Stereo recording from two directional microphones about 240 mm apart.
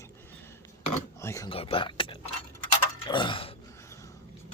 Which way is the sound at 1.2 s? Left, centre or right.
Centre.